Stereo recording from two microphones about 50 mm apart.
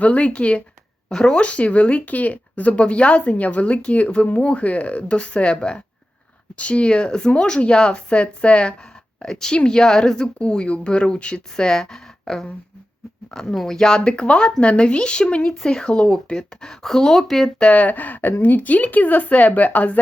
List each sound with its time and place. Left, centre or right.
0.0 s a woman's voice: left
1.4 s a woman's voice: left
15.4 s a woman's voice: centre
17.6 s a woman's voice: left